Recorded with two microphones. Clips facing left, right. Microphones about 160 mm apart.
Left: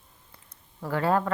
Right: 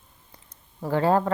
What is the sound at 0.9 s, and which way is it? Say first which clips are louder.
Speech: right 3 dB; 30° right (ahead or behind).